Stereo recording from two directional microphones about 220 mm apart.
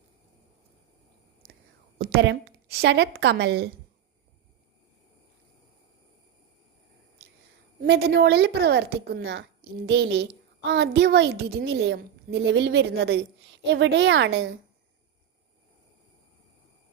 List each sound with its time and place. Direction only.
1.4 s whispering: 45° right (ahead or behind)
2.0 s a woman's voice: 45° right (ahead or behind)
7.9 s a woman's voice: 50° right (ahead or behind)